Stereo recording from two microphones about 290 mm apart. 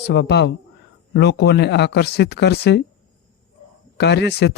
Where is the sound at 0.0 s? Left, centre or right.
Left.